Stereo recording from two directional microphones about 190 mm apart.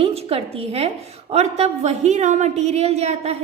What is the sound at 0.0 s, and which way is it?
A woman's voice, 30° right (ahead or behind).